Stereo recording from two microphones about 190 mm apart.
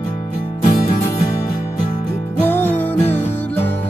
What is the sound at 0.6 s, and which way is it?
Music, 25° left (ahead or behind).